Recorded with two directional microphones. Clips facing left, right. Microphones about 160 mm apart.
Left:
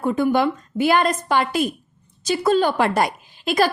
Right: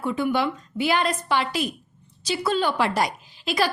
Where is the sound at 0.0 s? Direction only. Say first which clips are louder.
Left 5 dB; 45° left (ahead or behind).